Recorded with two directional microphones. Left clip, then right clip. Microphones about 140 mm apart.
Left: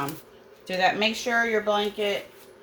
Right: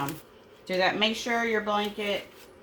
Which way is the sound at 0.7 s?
35° left (ahead or behind).